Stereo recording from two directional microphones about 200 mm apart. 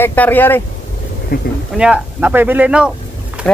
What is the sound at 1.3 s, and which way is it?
Speech, 50° left (ahead or behind).